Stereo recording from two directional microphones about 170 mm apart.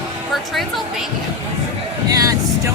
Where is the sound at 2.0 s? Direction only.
20° right (ahead or behind).